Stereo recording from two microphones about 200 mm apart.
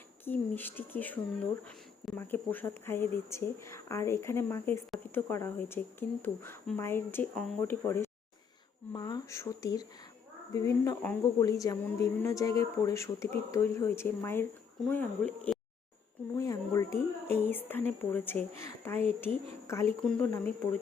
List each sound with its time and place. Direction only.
0.3 s speech: 10° left (ahead or behind)
20.1 s speech: 5° left (ahead or behind)